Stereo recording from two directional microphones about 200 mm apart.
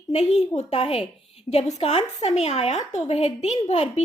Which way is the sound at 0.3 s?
35° left (ahead or behind).